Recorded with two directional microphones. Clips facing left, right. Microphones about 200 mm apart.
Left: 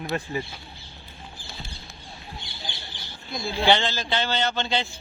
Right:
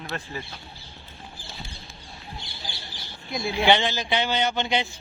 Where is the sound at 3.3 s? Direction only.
20° right (ahead or behind).